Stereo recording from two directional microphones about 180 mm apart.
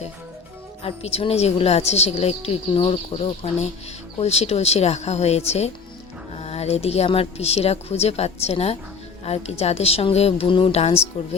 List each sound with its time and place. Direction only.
0.9 s a woman's voice: 35° left (ahead or behind)